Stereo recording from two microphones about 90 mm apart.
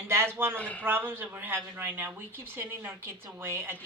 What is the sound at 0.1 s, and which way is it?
Speech, 25° right (ahead or behind).